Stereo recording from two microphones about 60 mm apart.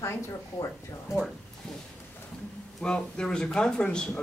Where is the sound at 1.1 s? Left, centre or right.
Centre.